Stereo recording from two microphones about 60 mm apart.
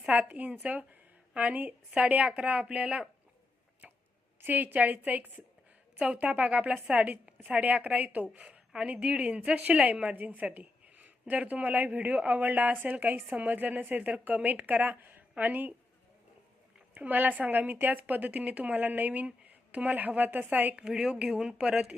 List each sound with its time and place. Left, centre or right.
0.1 s a woman's voice: right
4.4 s a woman's voice: right
16.9 s a woman's voice: right
20.7 s speech: centre